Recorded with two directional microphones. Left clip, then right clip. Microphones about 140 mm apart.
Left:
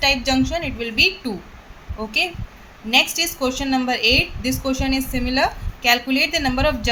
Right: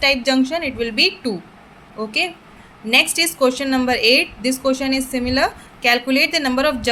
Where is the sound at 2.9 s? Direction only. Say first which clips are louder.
Right 2 dB; 40° right (ahead or behind).